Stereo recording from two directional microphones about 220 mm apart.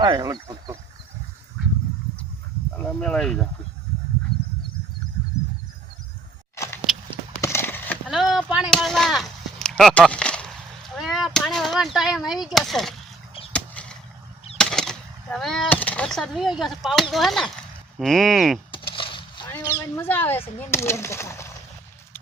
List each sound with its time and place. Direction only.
0.0 s speech: 15° right (ahead or behind)
3.0 s speech: 5° left (ahead or behind)
6.9 s clip-clop: centre (ahead or behind)
7.4 s a sound: 10° left (ahead or behind)
10.9 s chop: centre (ahead or behind)
12.5 s speech: centre (ahead or behind)
13.5 s chop: 5° left (ahead or behind)
14.6 s speech: 5° left (ahead or behind)
18.7 s a sound: 20° left (ahead or behind)
19.5 s a sound: 10° left (ahead or behind)
20.0 s speech: 10° left (ahead or behind)